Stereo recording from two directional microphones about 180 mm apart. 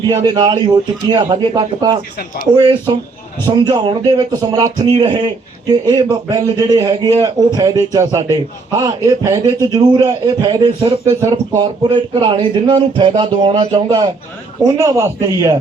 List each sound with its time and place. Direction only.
0.1 s a man's voice: 20° right (ahead or behind)
2.1 s speech: 55° left (ahead or behind)
2.6 s a man's voice: 25° right (ahead or behind)
14.8 s a man's voice: 15° right (ahead or behind)